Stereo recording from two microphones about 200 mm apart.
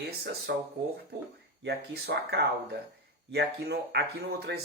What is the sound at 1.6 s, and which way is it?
Speech, 55° right (ahead or behind).